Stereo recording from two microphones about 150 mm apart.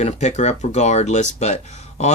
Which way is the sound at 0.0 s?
50° left (ahead or behind).